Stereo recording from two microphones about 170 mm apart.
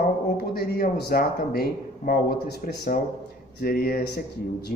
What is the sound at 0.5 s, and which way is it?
Speech, 65° left (ahead or behind).